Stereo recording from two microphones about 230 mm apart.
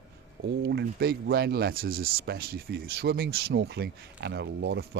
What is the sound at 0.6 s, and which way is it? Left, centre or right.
Speech, right.